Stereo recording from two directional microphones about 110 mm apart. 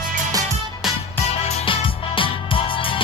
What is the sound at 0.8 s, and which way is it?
Music, 5° right (ahead or behind).